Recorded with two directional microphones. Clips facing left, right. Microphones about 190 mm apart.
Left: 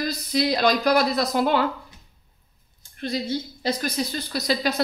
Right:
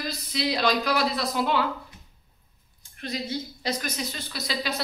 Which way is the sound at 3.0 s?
30° left (ahead or behind).